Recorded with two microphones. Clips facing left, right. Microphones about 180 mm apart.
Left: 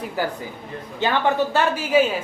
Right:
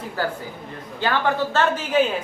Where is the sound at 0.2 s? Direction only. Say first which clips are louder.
Even; 15° left (ahead or behind).